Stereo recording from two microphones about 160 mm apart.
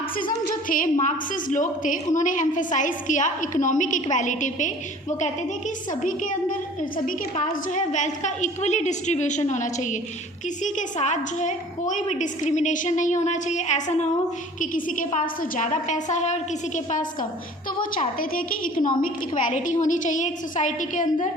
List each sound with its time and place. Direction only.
0.2 s a woman's voice: 60° left (ahead or behind)
5.9 s a woman's voice: 55° left (ahead or behind)